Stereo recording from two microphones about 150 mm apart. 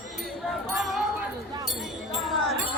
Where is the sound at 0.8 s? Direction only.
Centre (ahead or behind).